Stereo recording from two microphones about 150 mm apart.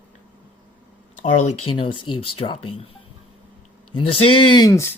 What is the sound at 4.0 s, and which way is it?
Speech, 35° left (ahead or behind).